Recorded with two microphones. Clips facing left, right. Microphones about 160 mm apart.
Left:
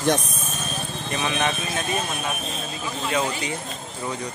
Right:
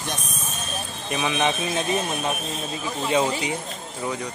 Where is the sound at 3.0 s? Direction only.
20° right (ahead or behind).